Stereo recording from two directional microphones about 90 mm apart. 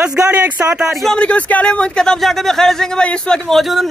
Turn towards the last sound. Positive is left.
turn(degrees=0)  # may be behind; listen again after turning